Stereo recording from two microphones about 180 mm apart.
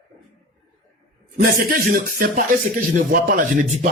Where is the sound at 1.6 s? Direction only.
55° right (ahead or behind).